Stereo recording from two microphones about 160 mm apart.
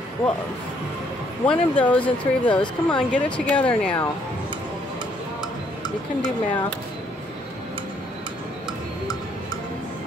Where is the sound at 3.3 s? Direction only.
5° left (ahead or behind).